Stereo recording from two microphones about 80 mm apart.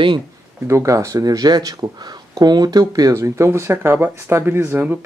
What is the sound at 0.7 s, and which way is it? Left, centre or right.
Speech, right.